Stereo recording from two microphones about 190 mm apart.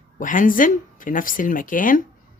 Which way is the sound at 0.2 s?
45° left (ahead or behind).